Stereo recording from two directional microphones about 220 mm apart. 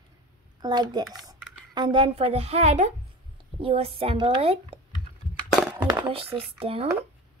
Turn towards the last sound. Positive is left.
turn(degrees=-25)  # may be behind; listen again after turning